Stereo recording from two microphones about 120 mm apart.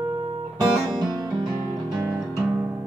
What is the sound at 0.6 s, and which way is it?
Music, 35° right (ahead or behind).